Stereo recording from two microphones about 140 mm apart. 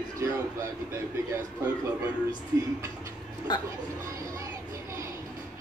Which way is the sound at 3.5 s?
30° left (ahead or behind).